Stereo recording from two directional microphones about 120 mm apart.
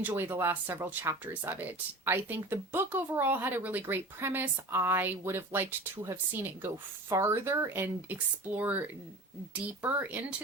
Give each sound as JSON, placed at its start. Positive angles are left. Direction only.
{"t": 0.1, "sound": "speech", "side_deg": -20}